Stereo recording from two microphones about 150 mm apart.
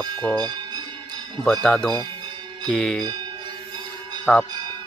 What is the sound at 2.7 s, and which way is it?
Speech, 5° left (ahead or behind).